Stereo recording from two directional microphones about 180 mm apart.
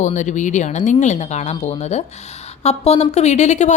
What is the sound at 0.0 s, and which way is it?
Speech, 40° left (ahead or behind).